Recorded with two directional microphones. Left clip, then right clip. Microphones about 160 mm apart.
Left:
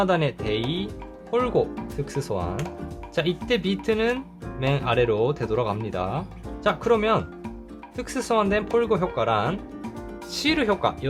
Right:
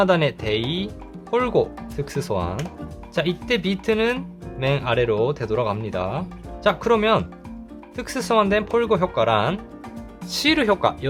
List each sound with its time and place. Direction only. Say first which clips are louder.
0.0 s speech: right 4 dB; 15° right (ahead or behind)